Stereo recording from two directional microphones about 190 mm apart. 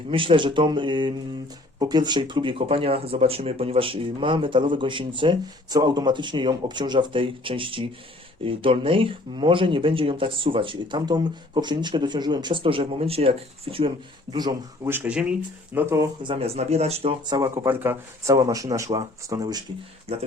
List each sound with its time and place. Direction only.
0.1 s speech: 25° right (ahead or behind)
14.9 s speech: 5° right (ahead or behind)
16.2 s speech: 30° right (ahead or behind)
20.1 s speech: 30° right (ahead or behind)